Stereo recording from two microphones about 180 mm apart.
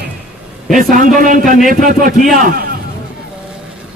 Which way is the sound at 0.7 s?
45° right (ahead or behind).